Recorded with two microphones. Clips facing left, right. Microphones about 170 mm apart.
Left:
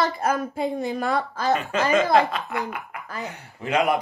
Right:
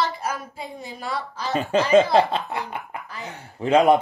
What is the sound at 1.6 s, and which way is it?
Speech, 35° right (ahead or behind).